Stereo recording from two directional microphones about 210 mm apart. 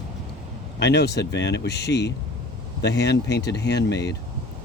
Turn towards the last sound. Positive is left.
turn(degrees=55)  # may be behind; listen again after turning